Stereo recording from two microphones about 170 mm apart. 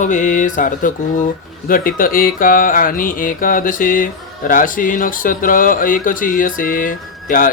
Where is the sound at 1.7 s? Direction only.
55° left (ahead or behind).